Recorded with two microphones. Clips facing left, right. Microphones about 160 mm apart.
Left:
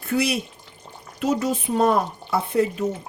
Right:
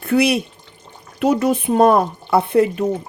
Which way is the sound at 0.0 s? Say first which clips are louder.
Right 7 dB; 65° right (ahead or behind).